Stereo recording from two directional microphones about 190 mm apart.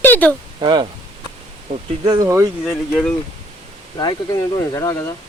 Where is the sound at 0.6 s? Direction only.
25° right (ahead or behind).